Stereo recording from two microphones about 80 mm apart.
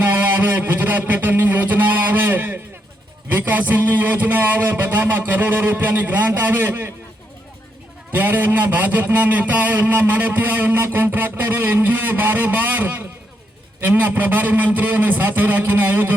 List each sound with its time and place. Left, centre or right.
0.6 s a man's voice: right
8.1 s a man's voice: right